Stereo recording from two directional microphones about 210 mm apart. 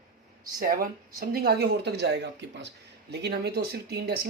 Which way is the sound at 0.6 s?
45° right (ahead or behind).